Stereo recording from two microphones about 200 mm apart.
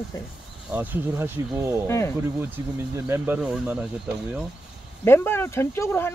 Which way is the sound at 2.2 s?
10° right (ahead or behind).